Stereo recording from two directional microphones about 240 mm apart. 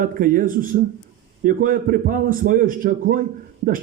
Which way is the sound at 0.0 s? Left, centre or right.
Right.